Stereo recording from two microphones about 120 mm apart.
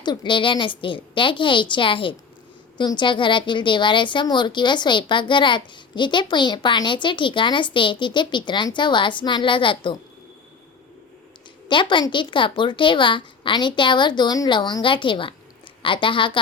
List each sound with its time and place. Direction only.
0.0 s a woman's voice: 35° left (ahead or behind)
11.7 s a woman's voice: 40° left (ahead or behind)